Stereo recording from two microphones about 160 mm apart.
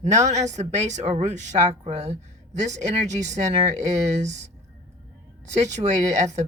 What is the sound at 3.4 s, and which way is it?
Speech, 45° right (ahead or behind).